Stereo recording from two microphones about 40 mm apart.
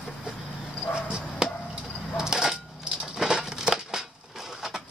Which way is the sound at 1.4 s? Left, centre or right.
Centre.